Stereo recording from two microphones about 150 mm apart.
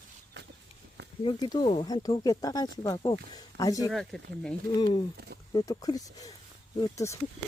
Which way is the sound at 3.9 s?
Centre (ahead or behind).